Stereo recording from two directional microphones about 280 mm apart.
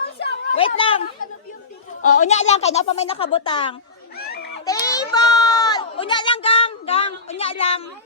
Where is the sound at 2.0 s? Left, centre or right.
Left.